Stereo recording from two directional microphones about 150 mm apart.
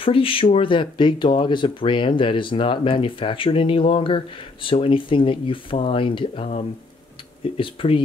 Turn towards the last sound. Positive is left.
turn(degrees=35)  # may be behind; listen again after turning